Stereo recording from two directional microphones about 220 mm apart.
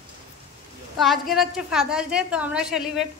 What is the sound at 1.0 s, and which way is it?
A woman's voice, centre (ahead or behind).